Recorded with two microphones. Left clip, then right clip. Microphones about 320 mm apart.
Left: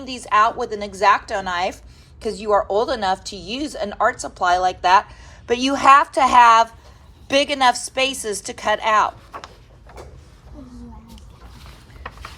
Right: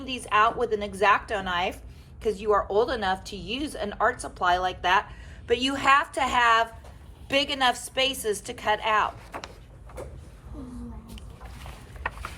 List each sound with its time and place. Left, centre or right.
0.0 s speech: centre